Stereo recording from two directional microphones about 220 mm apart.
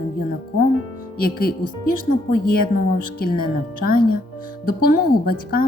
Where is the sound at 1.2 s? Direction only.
40° left (ahead or behind).